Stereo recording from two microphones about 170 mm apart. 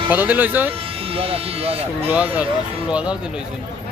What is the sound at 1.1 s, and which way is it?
Speech, 35° right (ahead or behind).